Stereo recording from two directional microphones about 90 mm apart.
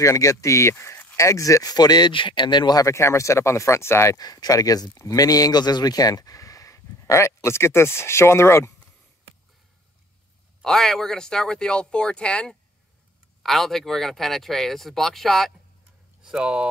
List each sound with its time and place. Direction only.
0.0 s speech: 35° left (ahead or behind)
4.2 s speech: 45° left (ahead or behind); by 8.7 s 30° left (ahead or behind)
10.6 s speech: 5° left (ahead or behind)
16.2 s speech: 10° right (ahead or behind)